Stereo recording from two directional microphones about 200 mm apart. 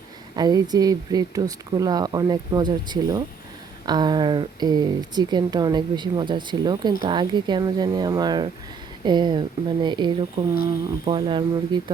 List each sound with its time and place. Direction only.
0.3 s speech: 20° right (ahead or behind)